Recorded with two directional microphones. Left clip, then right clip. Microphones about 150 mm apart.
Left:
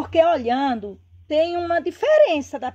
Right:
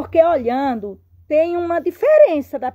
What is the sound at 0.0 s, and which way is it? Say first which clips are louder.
A woman's voice: right 3 dB; 45° right (ahead or behind).